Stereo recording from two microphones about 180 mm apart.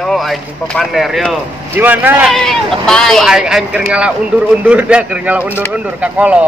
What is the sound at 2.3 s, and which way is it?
A man's voice, 5° left (ahead or behind).